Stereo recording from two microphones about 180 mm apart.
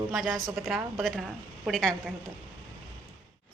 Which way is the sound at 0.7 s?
Centre (ahead or behind).